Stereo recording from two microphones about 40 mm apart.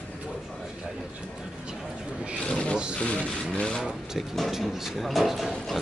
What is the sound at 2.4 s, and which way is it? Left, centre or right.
Speech, left.